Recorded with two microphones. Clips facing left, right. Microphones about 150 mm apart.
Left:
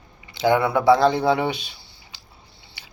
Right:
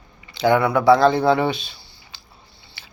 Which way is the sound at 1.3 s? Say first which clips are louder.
Right 3 dB; 15° left (ahead or behind).